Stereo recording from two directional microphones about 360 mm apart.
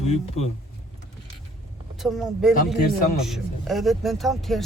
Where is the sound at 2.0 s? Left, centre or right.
Centre.